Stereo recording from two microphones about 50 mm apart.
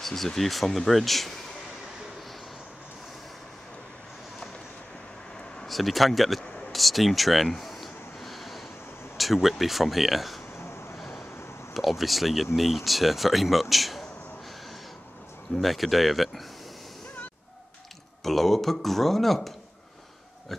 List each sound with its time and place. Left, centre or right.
0.0 s speech: centre
5.7 s speech: centre
6.7 s a sound: centre
9.1 s speech: centre
10.6 s vehicle: left
11.7 s speech: centre
15.6 s speech: centre
18.2 s speech: centre